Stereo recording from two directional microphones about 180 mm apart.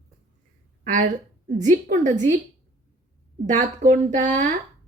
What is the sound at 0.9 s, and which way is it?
A woman's voice, 45° right (ahead or behind).